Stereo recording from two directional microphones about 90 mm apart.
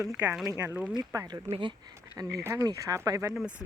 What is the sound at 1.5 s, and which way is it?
Speech, 70° right (ahead or behind).